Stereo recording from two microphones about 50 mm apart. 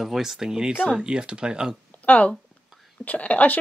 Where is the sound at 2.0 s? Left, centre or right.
Left.